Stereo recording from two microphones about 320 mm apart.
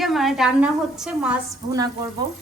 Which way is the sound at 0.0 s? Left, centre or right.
Centre.